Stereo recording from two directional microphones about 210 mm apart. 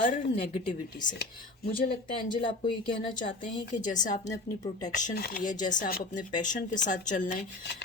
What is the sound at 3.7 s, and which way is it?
A woman's voice, 35° left (ahead or behind).